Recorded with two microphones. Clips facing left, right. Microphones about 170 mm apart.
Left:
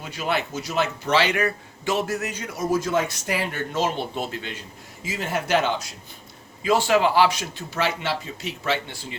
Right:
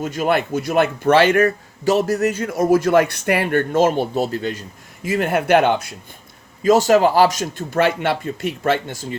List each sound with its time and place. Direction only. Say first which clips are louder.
0.0 s a man's voice: right 7 dB; 50° right (ahead or behind)
5.0 s a man's voice: right 9 dB; 60° right (ahead or behind)
6.6 s a man's voice: right 6 dB; 40° right (ahead or behind)